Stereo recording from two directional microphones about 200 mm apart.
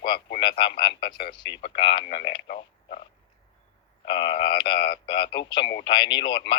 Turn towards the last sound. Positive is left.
turn(degrees=25)  # may be behind; listen again after turning